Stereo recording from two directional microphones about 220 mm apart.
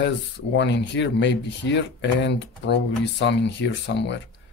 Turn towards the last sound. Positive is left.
turn(degrees=55)  # may be behind; listen again after turning